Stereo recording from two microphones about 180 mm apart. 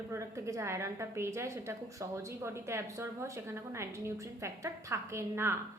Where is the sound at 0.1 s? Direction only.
15° right (ahead or behind).